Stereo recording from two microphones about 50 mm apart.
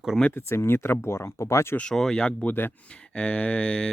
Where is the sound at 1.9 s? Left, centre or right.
Centre.